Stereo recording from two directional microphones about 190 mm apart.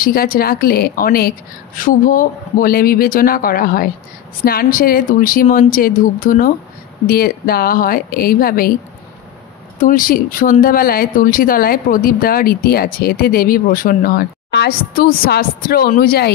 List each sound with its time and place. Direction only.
0.0 s speech: 50° left (ahead or behind)
9.8 s speech: 45° left (ahead or behind)